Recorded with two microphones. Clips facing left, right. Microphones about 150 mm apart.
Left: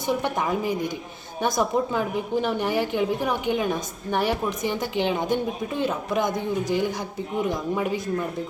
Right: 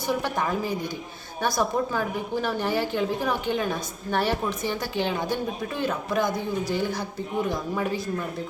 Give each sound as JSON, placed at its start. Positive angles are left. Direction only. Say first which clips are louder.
{"t": 0.1, "sound": "a woman's voice", "louder": "left 2 dB", "side_deg": 15}